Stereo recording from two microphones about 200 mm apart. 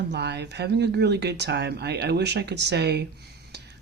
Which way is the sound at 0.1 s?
55° right (ahead or behind).